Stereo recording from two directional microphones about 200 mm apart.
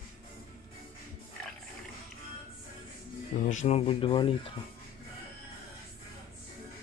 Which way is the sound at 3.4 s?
35° left (ahead or behind).